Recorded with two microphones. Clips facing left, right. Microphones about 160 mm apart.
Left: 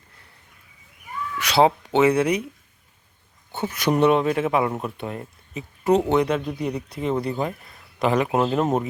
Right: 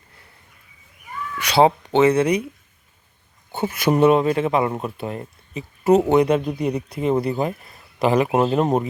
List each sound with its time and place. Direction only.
1.4 s speech: centre (ahead or behind)
3.5 s speech: 10° right (ahead or behind)
8.4 s speech: 15° right (ahead or behind)